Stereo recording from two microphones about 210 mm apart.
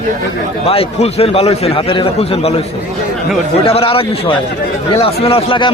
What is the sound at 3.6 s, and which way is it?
A man's voice, 25° left (ahead or behind).